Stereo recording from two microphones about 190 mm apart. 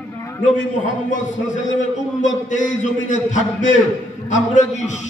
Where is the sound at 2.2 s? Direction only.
40° left (ahead or behind).